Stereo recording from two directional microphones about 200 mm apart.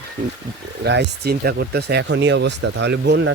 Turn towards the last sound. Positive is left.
turn(degrees=-60)  # may be behind; listen again after turning